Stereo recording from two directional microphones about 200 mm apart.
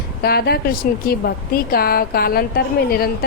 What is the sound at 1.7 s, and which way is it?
A woman's voice, 50° left (ahead or behind).